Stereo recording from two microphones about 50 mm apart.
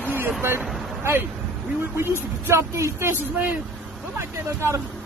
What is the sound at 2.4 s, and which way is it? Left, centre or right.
Speech, right.